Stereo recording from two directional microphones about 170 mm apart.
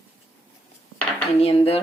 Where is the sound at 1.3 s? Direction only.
35° left (ahead or behind).